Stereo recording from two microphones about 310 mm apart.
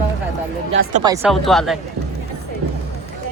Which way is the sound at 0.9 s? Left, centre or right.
Centre.